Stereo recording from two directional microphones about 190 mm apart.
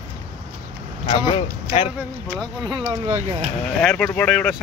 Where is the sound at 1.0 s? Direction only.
25° left (ahead or behind).